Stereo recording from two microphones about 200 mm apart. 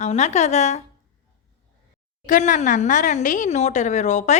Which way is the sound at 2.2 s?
40° left (ahead or behind).